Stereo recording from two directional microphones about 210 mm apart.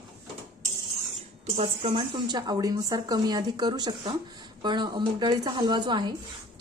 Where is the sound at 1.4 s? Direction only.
25° right (ahead or behind).